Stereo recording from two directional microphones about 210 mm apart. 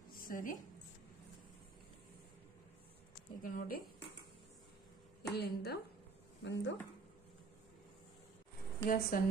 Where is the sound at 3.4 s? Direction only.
40° left (ahead or behind).